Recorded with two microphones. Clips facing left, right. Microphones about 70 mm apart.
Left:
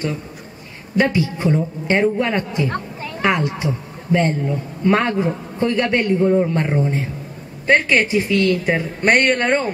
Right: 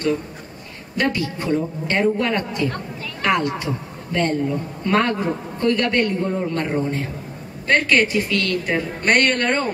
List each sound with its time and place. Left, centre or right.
0.9 s a man's voice: centre